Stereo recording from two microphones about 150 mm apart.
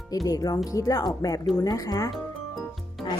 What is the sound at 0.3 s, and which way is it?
A woman's voice, 25° left (ahead or behind).